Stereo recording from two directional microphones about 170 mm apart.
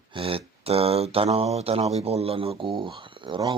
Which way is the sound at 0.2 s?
30° right (ahead or behind).